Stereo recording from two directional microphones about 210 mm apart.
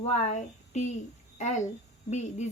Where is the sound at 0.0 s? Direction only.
35° left (ahead or behind).